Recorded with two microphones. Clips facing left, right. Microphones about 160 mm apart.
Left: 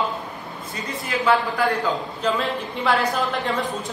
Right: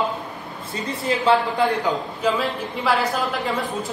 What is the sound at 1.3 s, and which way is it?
Speech, 20° right (ahead or behind).